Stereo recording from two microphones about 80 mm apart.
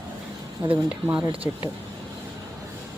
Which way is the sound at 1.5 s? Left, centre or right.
Right.